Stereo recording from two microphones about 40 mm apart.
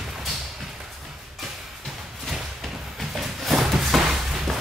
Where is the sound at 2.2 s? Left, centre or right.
Centre.